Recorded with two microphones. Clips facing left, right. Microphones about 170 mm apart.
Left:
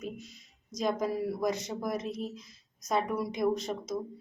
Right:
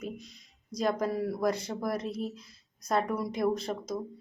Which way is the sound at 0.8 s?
Centre (ahead or behind).